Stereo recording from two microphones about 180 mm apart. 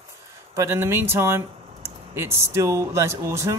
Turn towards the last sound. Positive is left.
turn(degrees=-15)  # may be behind; listen again after turning